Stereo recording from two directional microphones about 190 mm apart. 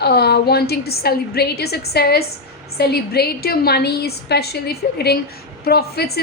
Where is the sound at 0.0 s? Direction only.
55° left (ahead or behind).